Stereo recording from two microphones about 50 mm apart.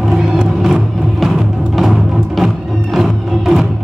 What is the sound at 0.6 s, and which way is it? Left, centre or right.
Vehicle, centre.